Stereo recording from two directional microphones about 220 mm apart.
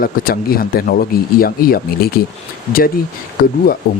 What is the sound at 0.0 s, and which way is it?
Speech, 40° left (ahead or behind).